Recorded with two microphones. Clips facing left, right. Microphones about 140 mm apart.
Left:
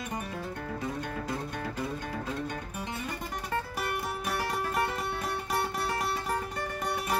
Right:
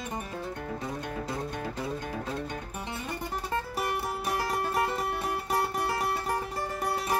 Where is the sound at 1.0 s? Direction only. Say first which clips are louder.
Right 1 dB; 25° right (ahead or behind).